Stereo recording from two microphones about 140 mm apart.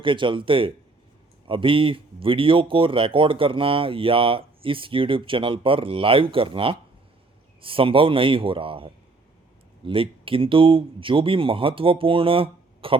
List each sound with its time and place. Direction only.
0.0 s speech: 35° right (ahead or behind)